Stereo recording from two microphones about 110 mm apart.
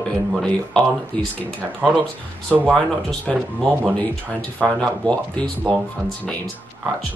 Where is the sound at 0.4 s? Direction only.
10° left (ahead or behind).